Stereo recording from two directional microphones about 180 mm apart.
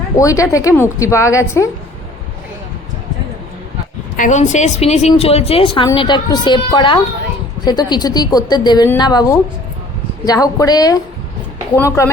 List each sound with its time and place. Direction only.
0.2 s a woman's voice: 15° left (ahead or behind)
4.2 s a woman's voice: 40° left (ahead or behind); by 12.1 s 15° left (ahead or behind)